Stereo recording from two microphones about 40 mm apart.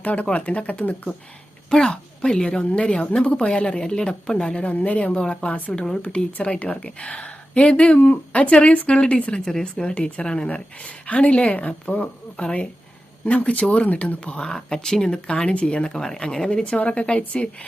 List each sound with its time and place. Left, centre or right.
0.0 s speech: left
1.7 s a woman's voice: left
4.6 s a woman's voice: left; by 9.8 s centre
9.8 s a woman's voice: left
14.4 s a woman's voice: centre; by 17.7 s left